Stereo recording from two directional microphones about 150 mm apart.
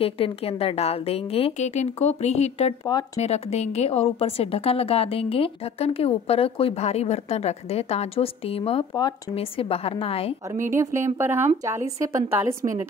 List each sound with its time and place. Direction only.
0.0 s a woman's voice: 40° left (ahead or behind)
2.8 s speech: 25° left (ahead or behind)
3.2 s a woman's voice: 45° left (ahead or behind)
10.7 s speech: 20° right (ahead or behind)